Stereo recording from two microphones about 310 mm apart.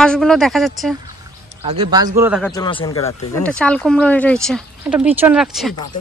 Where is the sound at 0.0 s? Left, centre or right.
Centre.